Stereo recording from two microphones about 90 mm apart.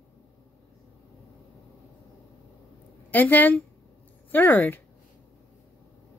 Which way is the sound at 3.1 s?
20° left (ahead or behind).